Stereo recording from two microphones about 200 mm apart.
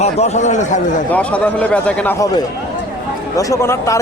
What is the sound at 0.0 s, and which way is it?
A man's voice, 35° left (ahead or behind).